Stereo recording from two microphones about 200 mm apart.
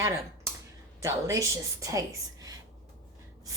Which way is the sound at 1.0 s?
15° right (ahead or behind).